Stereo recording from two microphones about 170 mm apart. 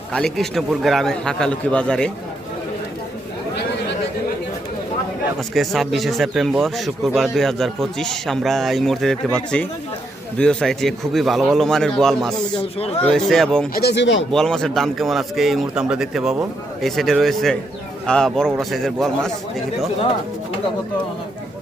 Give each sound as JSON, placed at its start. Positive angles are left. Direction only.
{"t": 0.1, "sound": "speech", "side_deg": 5}
{"t": 5.4, "sound": "speech", "side_deg": 0}
{"t": 13.7, "sound": "speech", "side_deg": 80}
{"t": 14.3, "sound": "speech", "side_deg": 5}